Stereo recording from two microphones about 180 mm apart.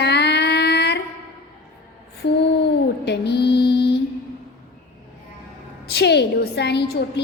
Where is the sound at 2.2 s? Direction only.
70° left (ahead or behind).